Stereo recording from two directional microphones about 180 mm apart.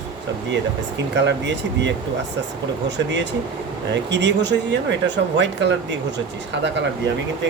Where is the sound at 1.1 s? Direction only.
75° right (ahead or behind).